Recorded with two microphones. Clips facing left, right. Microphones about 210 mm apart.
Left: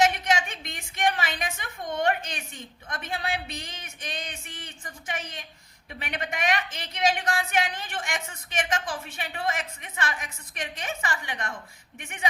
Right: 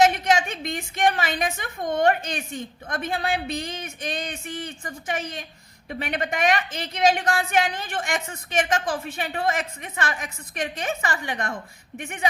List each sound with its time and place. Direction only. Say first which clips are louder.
0.0 s a woman's voice: right 4 dB; 45° right (ahead or behind)